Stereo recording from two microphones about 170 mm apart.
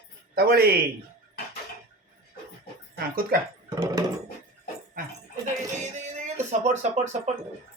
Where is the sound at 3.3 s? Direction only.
60° right (ahead or behind).